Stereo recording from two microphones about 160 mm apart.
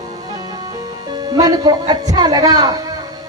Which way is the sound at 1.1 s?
25° right (ahead or behind).